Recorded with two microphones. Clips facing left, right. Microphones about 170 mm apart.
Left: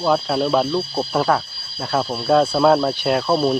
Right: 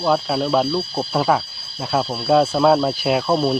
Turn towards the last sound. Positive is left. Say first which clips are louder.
# even
turn(degrees=0)  # may be behind; listen again after turning